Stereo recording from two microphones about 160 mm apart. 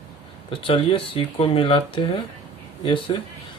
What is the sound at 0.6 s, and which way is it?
Speech, 30° left (ahead or behind).